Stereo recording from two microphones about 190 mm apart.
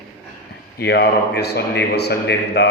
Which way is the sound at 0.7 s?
60° left (ahead or behind).